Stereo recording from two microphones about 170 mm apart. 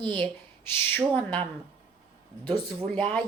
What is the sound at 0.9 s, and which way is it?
Speech, 10° left (ahead or behind).